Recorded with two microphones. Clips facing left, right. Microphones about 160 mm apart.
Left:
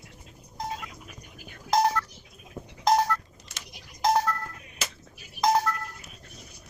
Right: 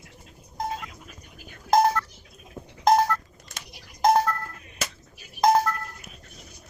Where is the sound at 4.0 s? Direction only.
50° right (ahead or behind).